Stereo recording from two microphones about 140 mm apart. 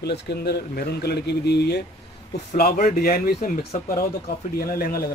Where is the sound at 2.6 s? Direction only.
90° left.